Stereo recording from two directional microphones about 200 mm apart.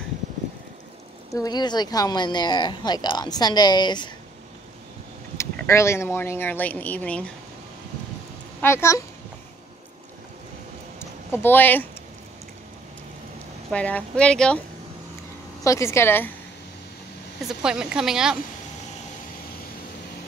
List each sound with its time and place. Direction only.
1.3 s speech: 20° left (ahead or behind)
5.4 s speech: 15° left (ahead or behind)
8.5 s a woman's voice: 15° left (ahead or behind)
11.0 s a sound: 10° left (ahead or behind)
13.7 s a woman's voice: 5° left (ahead or behind)
15.6 s speech: 15° left (ahead or behind)
17.4 s a woman's voice: 5° right (ahead or behind)